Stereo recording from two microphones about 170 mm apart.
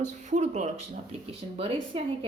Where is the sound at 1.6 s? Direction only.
35° right (ahead or behind).